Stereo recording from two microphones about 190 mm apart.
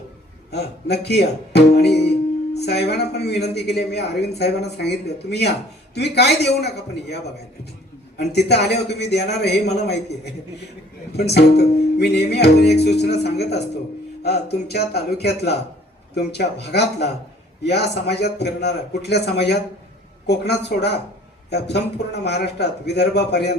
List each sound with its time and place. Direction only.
0.5 s speech: 60° left (ahead or behind)
8.2 s speech: 60° left (ahead or behind)
11.3 s speech: 60° left (ahead or behind)